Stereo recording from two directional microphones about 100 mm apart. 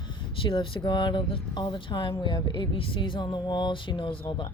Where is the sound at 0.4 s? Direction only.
60° left (ahead or behind).